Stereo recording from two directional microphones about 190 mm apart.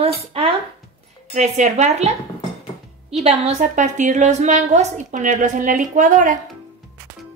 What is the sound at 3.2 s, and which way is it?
A woman's voice, 35° right (ahead or behind).